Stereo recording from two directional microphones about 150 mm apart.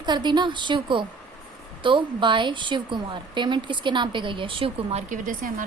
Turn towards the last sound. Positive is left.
turn(degrees=-60)  # may be behind; listen again after turning